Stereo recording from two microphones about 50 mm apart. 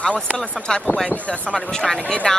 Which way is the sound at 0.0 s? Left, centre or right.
Left.